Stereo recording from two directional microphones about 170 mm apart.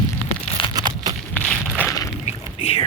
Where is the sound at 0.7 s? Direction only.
25° right (ahead or behind).